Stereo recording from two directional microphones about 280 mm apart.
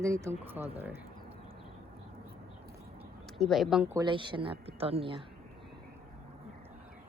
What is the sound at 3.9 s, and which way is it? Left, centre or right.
A woman's voice, centre.